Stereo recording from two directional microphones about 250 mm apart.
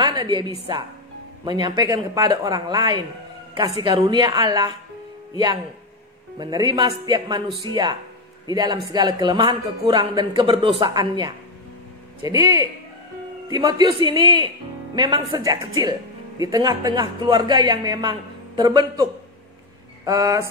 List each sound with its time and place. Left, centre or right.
0.0 s a sound: centre
1.4 s speech: centre
15.0 s speech: centre
20.1 s speech: centre